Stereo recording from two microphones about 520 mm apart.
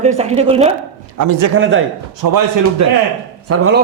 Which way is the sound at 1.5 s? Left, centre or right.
Right.